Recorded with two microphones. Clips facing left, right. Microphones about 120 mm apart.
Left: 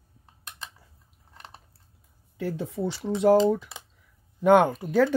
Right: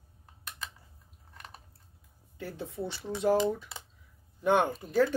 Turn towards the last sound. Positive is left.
turn(degrees=75)  # may be behind; listen again after turning